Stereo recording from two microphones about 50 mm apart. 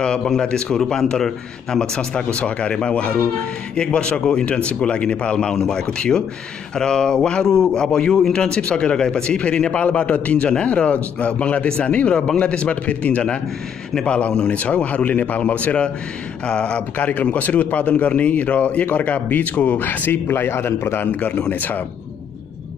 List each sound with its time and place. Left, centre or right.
0.0 s a man's voice: centre
16.9 s speech: left
20.1 s a man's voice: left